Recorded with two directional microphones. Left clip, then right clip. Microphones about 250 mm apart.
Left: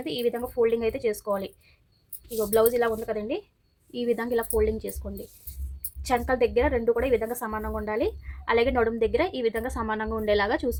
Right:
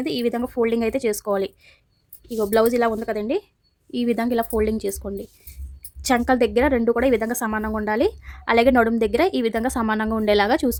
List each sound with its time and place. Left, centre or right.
0.0 s a woman's voice: right